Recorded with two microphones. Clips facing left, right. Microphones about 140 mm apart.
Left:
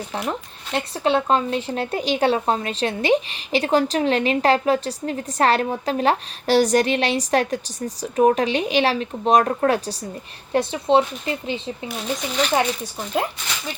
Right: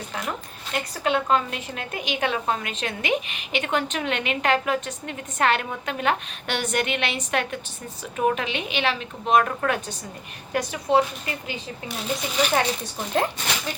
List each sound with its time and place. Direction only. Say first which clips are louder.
0.1 s a woman's voice: left 4 dB; 30° left (ahead or behind)
11.9 s speech: left 1 dB; centre (ahead or behind)